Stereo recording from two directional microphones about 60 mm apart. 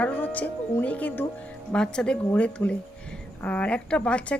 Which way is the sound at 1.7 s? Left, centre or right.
Centre.